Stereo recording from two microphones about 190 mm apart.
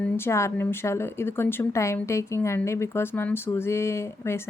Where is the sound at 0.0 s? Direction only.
15° left (ahead or behind).